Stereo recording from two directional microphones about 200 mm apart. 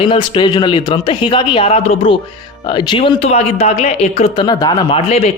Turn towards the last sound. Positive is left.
turn(degrees=30)  # may be behind; listen again after turning